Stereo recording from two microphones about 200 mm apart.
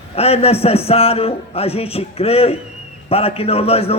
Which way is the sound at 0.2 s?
30° left (ahead or behind).